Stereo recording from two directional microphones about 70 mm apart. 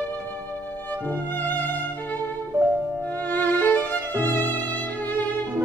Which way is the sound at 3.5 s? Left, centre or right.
Left.